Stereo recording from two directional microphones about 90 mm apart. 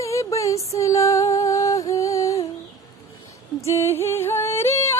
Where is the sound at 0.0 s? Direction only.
35° left (ahead or behind).